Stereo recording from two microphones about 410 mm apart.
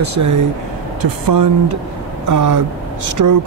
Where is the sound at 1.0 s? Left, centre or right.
Right.